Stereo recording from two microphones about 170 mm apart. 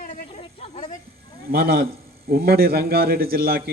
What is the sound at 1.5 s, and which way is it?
A man's voice, 65° right (ahead or behind).